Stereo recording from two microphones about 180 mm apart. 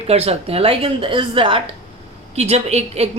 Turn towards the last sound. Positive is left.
turn(degrees=-35)  # may be behind; listen again after turning